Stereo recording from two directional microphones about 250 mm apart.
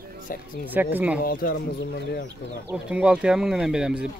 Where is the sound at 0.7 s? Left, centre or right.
Centre.